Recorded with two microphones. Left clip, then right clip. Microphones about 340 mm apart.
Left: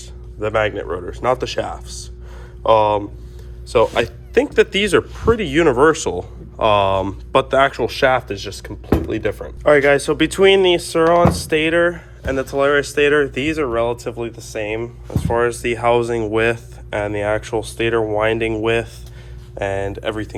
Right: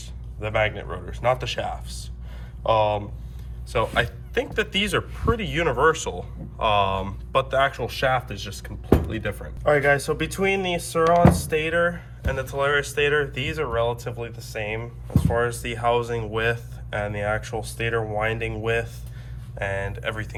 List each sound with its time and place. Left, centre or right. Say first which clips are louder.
0.3 s speech: left 6 dB; centre